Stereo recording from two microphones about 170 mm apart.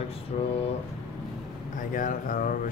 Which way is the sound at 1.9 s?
50° left (ahead or behind).